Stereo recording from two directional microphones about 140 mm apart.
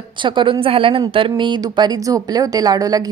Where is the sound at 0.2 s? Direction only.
35° right (ahead or behind).